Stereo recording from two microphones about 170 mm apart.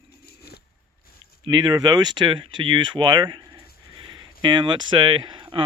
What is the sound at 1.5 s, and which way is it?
Speech, 25° right (ahead or behind).